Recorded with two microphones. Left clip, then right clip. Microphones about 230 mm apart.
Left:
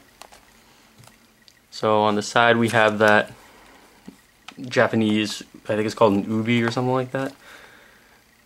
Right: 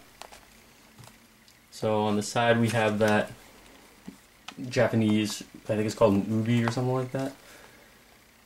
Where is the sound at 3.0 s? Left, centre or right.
Centre.